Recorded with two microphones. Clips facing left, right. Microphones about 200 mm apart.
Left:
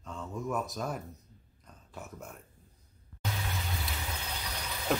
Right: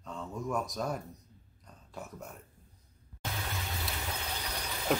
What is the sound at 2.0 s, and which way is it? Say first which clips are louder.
Speech: right 1 dB; centre (ahead or behind).